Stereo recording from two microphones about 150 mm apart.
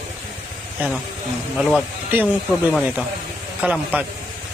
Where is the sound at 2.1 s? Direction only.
15° right (ahead or behind).